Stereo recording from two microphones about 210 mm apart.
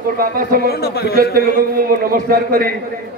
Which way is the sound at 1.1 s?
45° right (ahead or behind).